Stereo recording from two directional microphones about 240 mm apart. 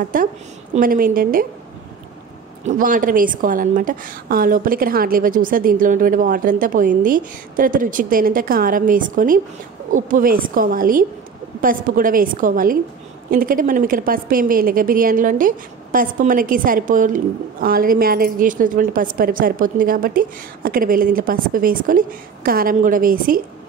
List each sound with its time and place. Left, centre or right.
0.1 s a woman's voice: right
2.6 s a woman's voice: right